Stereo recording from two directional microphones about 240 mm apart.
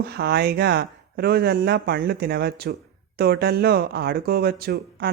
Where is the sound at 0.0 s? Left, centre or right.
Right.